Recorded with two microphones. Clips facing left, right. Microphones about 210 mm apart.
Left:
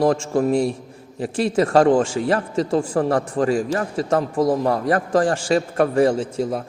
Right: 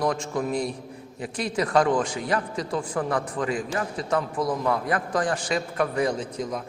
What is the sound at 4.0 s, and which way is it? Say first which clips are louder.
A man's voice: left 7 dB; 30° left (ahead or behind).